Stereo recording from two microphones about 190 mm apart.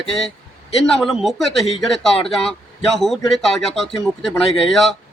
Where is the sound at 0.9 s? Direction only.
Centre (ahead or behind).